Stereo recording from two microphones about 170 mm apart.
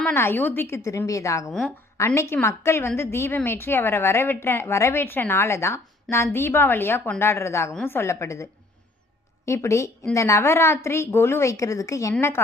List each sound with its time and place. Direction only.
0.0 s a woman's voice: 15° left (ahead or behind)
1.5 s a woman's voice: centre (ahead or behind)
2.0 s a woman's voice: 15° left (ahead or behind)
9.5 s a woman's voice: 15° left (ahead or behind)